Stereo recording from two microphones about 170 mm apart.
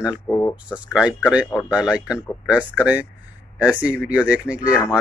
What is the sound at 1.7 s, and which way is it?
A man's voice, 5° right (ahead or behind).